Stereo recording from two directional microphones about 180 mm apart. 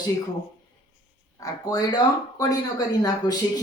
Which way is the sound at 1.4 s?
20° left (ahead or behind).